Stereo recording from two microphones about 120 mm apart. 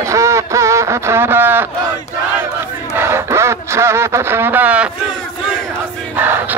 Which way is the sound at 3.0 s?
20° right (ahead or behind).